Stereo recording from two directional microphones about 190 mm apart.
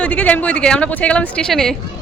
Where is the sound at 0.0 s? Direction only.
10° left (ahead or behind).